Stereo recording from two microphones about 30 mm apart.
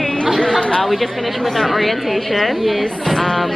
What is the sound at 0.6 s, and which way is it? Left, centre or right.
Chatter, left.